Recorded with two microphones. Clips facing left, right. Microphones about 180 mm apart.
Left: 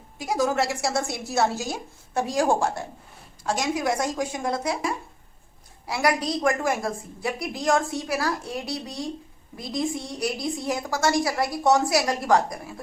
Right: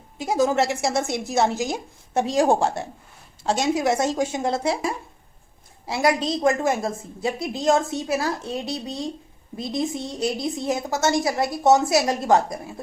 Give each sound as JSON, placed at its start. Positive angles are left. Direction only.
{"t": 0.2, "sound": "a woman's voice", "side_deg": -25}
{"t": 5.9, "sound": "a woman's voice", "side_deg": -25}